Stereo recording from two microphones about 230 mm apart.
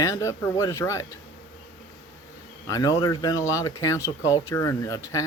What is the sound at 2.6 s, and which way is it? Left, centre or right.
Speech, centre.